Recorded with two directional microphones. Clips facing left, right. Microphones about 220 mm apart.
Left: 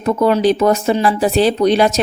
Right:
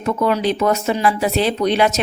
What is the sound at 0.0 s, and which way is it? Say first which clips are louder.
Speech: left 5 dB; 35° left (ahead or behind).